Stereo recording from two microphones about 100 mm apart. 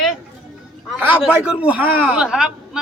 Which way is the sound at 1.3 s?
15° right (ahead or behind).